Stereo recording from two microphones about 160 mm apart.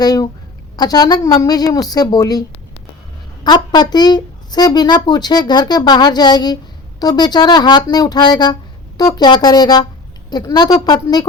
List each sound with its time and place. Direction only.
0.0 s speech: 25° left (ahead or behind)
3.4 s speech: 25° left (ahead or behind)